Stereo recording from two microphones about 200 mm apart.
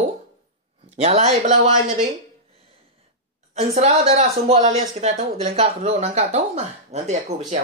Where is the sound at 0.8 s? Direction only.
30° right (ahead or behind).